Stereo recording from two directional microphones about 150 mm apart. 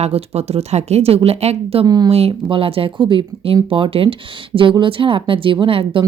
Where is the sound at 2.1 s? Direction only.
40° right (ahead or behind).